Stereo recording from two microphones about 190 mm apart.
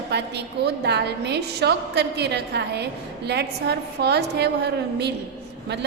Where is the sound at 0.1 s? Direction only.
60° right (ahead or behind).